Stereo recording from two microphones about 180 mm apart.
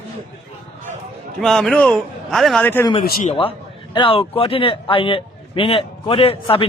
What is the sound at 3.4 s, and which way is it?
A man's voice, 30° left (ahead or behind).